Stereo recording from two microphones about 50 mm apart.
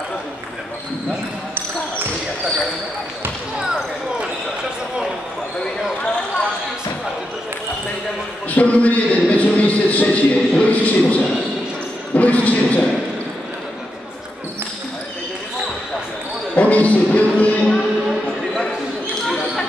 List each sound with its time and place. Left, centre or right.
8.5 s a man's voice: left
12.2 s basketball bounce: left
16.5 s speech: left
19.2 s basketball bounce: centre